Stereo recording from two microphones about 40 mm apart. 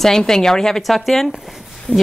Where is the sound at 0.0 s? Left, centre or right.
Centre.